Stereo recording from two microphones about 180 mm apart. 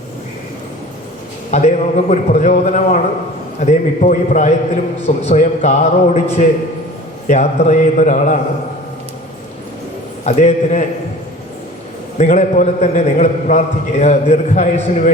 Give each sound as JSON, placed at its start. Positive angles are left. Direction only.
{"t": 1.5, "sound": "a man's voice", "side_deg": 40}
{"t": 7.3, "sound": "a man's voice", "side_deg": 40}
{"t": 10.2, "sound": "a man's voice", "side_deg": 40}
{"t": 12.1, "sound": "a man's voice", "side_deg": 40}